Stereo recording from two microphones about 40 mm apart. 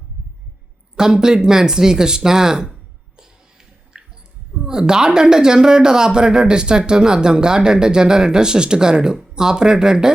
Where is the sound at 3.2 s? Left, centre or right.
Centre.